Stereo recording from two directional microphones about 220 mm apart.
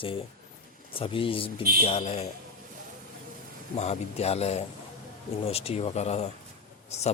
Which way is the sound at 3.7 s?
30° left (ahead or behind).